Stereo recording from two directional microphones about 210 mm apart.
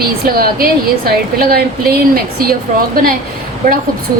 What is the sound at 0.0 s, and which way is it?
A woman's voice, 45° right (ahead or behind).